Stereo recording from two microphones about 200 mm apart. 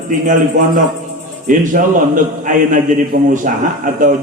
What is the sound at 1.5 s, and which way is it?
A man's voice, 40° right (ahead or behind).